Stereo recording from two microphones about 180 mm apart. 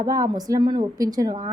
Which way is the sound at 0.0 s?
20° right (ahead or behind).